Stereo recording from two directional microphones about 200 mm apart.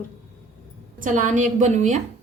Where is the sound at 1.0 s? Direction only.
40° right (ahead or behind).